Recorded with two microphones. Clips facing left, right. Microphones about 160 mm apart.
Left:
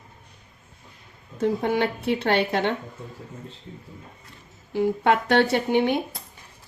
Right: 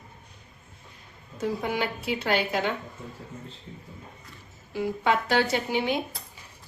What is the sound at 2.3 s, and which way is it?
Speech, 65° left (ahead or behind).